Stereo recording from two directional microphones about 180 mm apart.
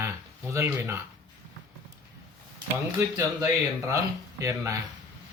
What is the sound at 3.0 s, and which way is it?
Speech, 15° right (ahead or behind).